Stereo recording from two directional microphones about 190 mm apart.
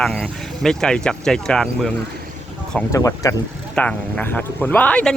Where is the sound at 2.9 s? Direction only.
20° left (ahead or behind).